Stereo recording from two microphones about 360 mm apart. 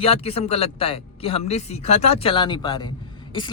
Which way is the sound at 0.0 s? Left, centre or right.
Centre.